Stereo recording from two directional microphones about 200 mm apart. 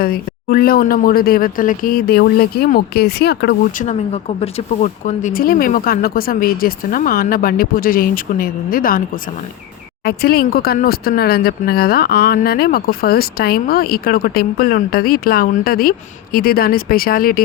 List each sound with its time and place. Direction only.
0.0 s speech: 45° left (ahead or behind)
10.0 s speech: 50° left (ahead or behind)